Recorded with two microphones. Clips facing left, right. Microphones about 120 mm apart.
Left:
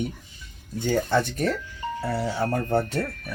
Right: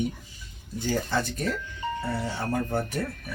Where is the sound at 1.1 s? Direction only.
65° left (ahead or behind).